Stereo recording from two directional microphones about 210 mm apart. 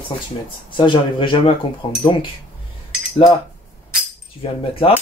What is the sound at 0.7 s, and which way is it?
Speech, 25° left (ahead or behind).